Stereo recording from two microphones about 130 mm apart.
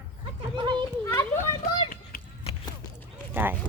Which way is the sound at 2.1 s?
90° left.